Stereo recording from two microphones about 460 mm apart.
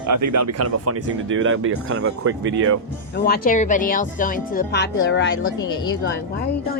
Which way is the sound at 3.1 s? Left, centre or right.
Centre.